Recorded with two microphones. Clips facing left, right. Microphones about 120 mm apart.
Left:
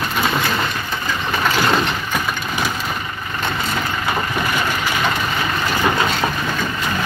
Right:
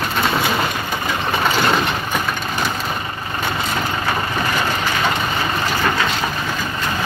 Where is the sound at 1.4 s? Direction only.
Centre (ahead or behind).